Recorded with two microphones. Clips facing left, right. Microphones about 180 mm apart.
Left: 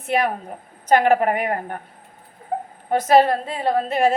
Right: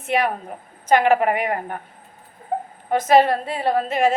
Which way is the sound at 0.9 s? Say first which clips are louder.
Even; 40° left (ahead or behind).